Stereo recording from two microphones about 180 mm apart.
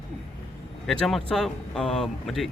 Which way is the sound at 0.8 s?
5° left (ahead or behind).